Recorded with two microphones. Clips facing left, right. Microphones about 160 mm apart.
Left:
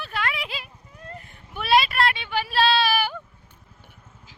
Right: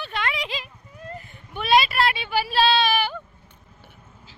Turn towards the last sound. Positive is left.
turn(degrees=10)  # may be behind; listen again after turning